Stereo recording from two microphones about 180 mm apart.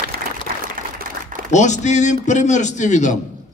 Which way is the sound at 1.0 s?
50° right (ahead or behind).